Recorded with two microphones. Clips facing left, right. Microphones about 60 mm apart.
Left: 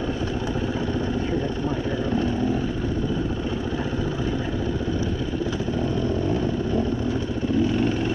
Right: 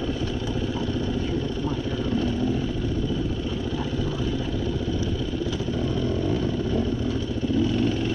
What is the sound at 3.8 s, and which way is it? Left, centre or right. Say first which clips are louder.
Vehicle: left 1 dB; left.